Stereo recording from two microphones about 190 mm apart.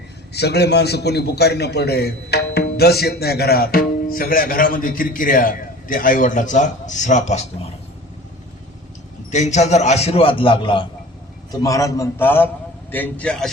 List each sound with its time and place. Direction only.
0.3 s a man's voice: 60° left (ahead or behind); by 7.4 s 40° left (ahead or behind)
9.3 s a man's voice: 35° left (ahead or behind); by 13.5 s 5° left (ahead or behind)